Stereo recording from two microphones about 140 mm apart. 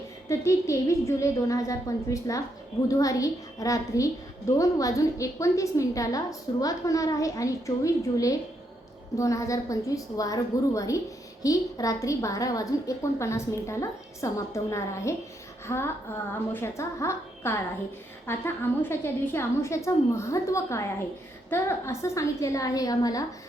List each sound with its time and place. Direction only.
0.3 s a woman's voice: 20° left (ahead or behind)